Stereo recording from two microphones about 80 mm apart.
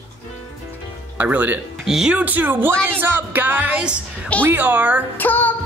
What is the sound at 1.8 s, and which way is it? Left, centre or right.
Speech, centre.